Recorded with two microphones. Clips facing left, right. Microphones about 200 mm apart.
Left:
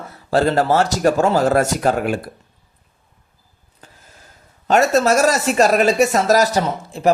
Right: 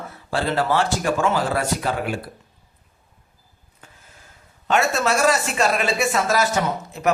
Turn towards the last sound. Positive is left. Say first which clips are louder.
# left 3 dB
turn(degrees=30)  # may be behind; listen again after turning